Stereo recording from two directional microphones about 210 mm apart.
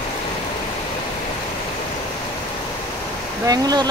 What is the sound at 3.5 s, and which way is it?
Speech, 20° right (ahead or behind).